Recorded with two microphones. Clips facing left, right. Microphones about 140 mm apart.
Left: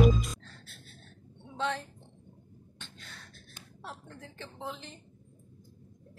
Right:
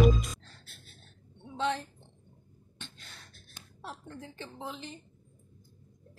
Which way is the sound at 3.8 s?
5° right (ahead or behind).